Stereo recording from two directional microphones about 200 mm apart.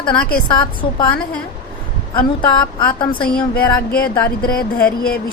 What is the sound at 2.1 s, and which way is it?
A woman's voice, 20° left (ahead or behind).